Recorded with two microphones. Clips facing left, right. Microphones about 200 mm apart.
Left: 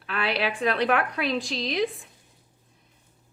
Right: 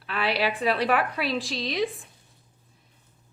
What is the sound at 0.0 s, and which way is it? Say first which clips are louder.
A woman's voice: right 1 dB; centre (ahead or behind).